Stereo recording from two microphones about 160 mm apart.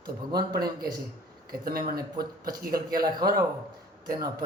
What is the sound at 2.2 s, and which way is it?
Speech, 25° right (ahead or behind).